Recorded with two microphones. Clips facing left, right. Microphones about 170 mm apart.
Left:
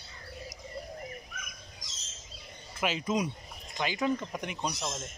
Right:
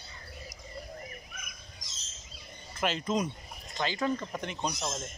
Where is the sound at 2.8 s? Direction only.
10° left (ahead or behind).